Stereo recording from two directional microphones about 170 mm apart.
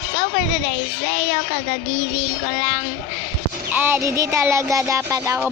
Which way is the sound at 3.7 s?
15° right (ahead or behind).